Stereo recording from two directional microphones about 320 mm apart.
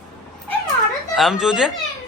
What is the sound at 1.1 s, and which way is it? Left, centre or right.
Speech, centre.